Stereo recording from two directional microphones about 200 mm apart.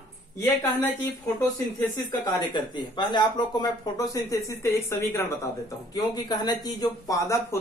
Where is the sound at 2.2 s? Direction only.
20° left (ahead or behind).